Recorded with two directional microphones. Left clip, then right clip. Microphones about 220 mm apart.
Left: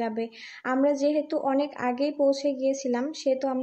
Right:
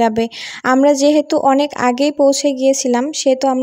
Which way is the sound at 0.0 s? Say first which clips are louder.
Right 15 dB; 50° right (ahead or behind).